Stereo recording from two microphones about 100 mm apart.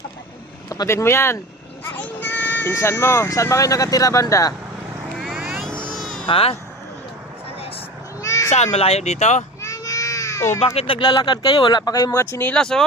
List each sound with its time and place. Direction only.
0.7 s speech: 35° left (ahead or behind)
5.2 s vehicle: 5° right (ahead or behind)
6.0 s music: 5° left (ahead or behind)
6.2 s speech: 70° left (ahead or behind)
8.2 s a sound: 35° left (ahead or behind)
8.7 s speech: 90° left
9.6 s baby cry: 30° left (ahead or behind)
10.8 s speech: 65° left (ahead or behind); by 12.1 s 40° left (ahead or behind)
12.1 s speech: 20° left (ahead or behind)
12.5 s speech: 5° left (ahead or behind)